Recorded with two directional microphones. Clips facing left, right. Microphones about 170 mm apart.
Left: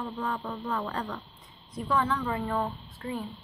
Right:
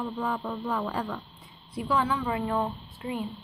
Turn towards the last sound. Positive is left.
turn(degrees=-15)  # may be behind; listen again after turning